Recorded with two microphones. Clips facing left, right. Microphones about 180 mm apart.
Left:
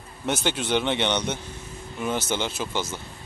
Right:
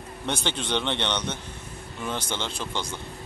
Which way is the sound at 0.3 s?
5° left (ahead or behind).